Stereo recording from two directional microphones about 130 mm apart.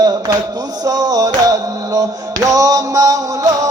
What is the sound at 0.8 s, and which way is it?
Music, 30° right (ahead or behind).